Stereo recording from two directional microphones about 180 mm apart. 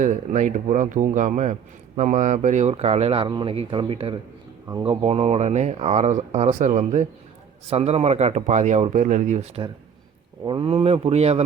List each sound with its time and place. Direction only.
0.0 s a man's voice: 45° right (ahead or behind)
10.4 s speech: 25° right (ahead or behind)